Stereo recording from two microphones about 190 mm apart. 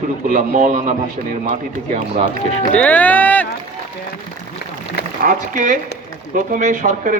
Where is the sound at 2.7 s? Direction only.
5° left (ahead or behind).